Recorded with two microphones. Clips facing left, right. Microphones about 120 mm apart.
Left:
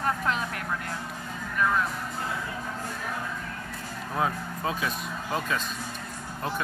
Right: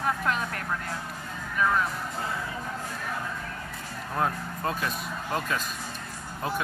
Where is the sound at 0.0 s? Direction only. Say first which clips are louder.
Even; centre (ahead or behind).